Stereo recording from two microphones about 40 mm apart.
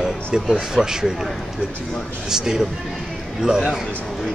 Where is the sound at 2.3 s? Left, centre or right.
Centre.